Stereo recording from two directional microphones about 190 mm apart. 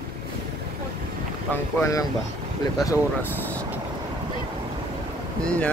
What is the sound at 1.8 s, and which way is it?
Speech, 15° left (ahead or behind).